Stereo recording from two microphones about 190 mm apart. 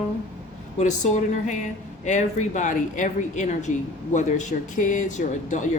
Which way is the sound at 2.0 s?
40° left (ahead or behind).